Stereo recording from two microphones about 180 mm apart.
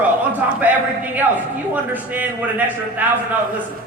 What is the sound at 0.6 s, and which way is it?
A man's voice, 10° right (ahead or behind).